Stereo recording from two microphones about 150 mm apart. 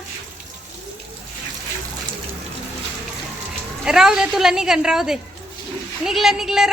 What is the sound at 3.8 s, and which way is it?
A woman's voice, 5° right (ahead or behind).